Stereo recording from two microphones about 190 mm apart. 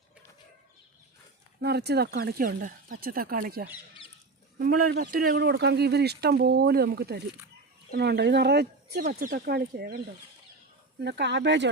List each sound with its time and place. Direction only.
1.6 s speech: 60° right (ahead or behind)
11.0 s speech: 65° right (ahead or behind)